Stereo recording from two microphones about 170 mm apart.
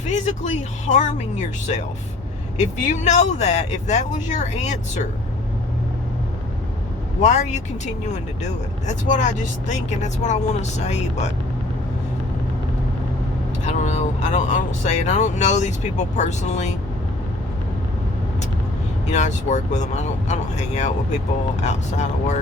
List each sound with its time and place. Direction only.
0.0 s speech: 45° left (ahead or behind)
7.2 s speech: 45° left (ahead or behind)
8.9 s speech: 45° left (ahead or behind)
13.7 s speech: 45° left (ahead or behind)
19.1 s speech: 45° left (ahead or behind)